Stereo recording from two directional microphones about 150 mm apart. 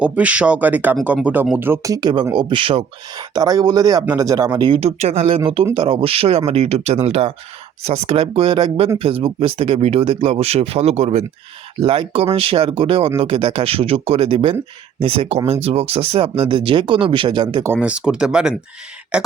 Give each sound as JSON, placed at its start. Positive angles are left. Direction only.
{"t": 0.0, "sound": "speech", "side_deg": -10}
{"t": 4.8, "sound": "speech", "side_deg": -45}
{"t": 17.7, "sound": "speech", "side_deg": -10}